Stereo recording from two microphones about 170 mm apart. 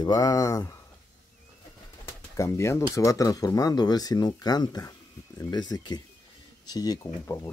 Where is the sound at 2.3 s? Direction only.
15° left (ahead or behind).